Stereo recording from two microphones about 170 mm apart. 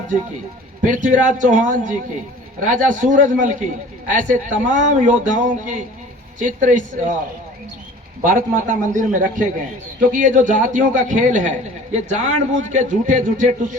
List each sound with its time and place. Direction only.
0.9 s a man's voice: 50° right (ahead or behind)
8.2 s a man's voice: 50° right (ahead or behind)